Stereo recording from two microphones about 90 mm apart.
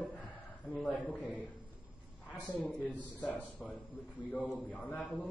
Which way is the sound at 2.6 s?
15° left (ahead or behind).